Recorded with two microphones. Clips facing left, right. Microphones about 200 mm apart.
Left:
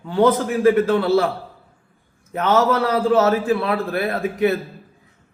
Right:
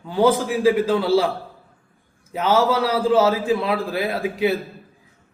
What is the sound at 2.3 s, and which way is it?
A man's voice, 10° right (ahead or behind).